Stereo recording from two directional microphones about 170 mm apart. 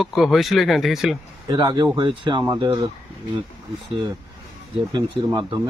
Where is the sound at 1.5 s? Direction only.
25° right (ahead or behind).